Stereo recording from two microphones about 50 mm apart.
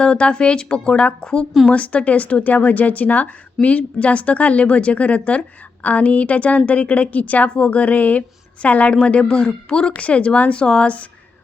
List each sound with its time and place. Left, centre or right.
0.0 s speech: centre